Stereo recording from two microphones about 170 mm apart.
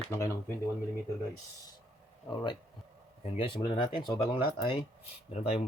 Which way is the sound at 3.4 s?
30° left (ahead or behind).